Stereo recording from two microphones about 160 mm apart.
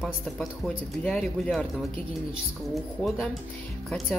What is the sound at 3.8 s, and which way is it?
Speech, centre (ahead or behind).